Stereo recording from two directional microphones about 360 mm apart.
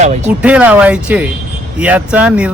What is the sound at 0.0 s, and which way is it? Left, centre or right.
Speech, centre.